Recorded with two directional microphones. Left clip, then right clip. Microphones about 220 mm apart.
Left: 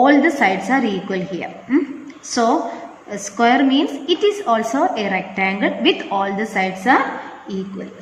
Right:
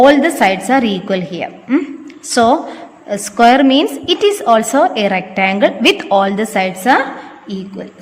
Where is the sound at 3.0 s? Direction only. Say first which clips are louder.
Right 7 dB; 50° right (ahead or behind).